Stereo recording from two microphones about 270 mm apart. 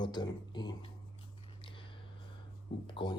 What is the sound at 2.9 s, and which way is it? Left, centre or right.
Speech, centre.